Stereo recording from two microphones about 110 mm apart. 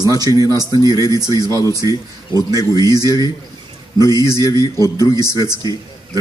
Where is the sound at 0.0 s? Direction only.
35° right (ahead or behind).